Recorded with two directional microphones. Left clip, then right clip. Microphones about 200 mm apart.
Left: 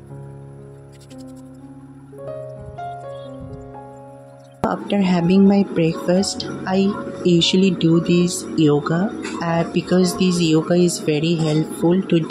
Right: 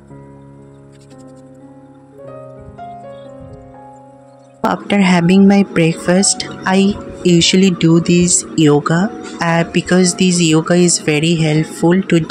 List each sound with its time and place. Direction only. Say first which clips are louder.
4.6 s speech: right 6 dB; 35° right (ahead or behind)